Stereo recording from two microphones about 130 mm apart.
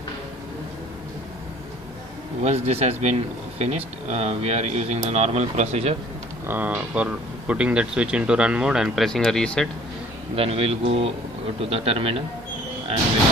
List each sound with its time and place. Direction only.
2.4 s speech: 55° right (ahead or behind)
6.5 s speech: 15° right (ahead or behind); by 9.6 s 5° left (ahead or behind)
10.3 s speech: 45° right (ahead or behind)